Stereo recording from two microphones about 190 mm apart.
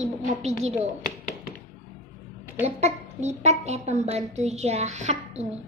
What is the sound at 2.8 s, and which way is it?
A woman's voice, 35° right (ahead or behind).